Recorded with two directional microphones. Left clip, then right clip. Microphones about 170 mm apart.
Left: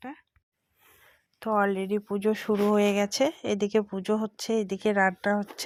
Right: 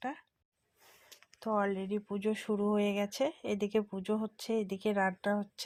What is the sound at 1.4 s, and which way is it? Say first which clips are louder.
Speech: left 7 dB; 45° left (ahead or behind).